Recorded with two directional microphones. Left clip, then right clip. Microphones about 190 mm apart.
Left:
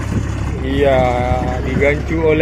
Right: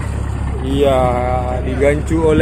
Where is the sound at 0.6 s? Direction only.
20° right (ahead or behind).